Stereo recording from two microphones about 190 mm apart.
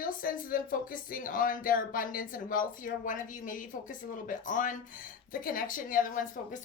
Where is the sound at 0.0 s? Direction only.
45° left (ahead or behind).